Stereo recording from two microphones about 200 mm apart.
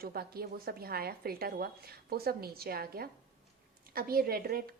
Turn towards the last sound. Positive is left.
turn(degrees=-50)  # may be behind; listen again after turning